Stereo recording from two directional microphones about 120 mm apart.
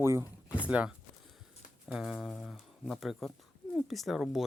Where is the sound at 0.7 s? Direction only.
10° right (ahead or behind).